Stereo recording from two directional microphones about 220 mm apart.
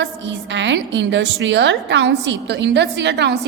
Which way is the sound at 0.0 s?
55° right (ahead or behind).